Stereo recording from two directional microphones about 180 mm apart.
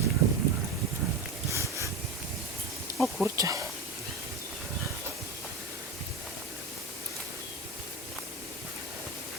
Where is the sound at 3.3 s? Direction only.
15° right (ahead or behind).